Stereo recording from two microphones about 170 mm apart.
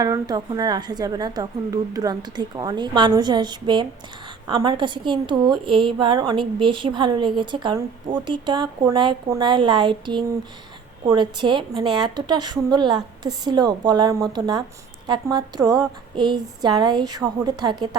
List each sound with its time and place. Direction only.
0.0 s a woman's voice: 20° right (ahead or behind)